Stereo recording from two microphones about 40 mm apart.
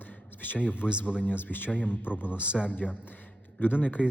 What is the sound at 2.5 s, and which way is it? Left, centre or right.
Speech, right.